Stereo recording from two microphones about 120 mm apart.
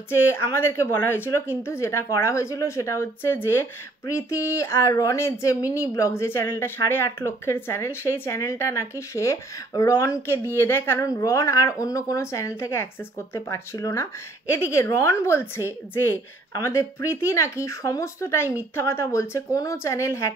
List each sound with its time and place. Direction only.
0.1 s speech: 20° left (ahead or behind)